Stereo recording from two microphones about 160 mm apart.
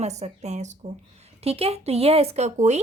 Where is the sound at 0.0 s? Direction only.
45° right (ahead or behind).